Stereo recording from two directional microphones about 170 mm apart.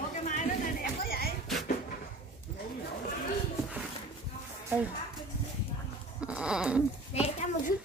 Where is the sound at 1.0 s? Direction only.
60° left (ahead or behind).